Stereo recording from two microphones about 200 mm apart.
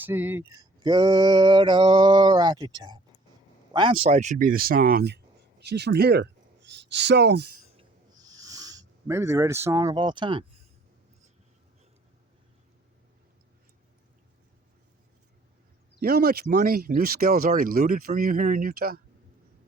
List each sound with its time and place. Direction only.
0.0 s speech: 10° right (ahead or behind); by 7.5 s 55° right (ahead or behind)
7.8 s a sound: 20° right (ahead or behind)
16.0 s speech: 50° right (ahead or behind)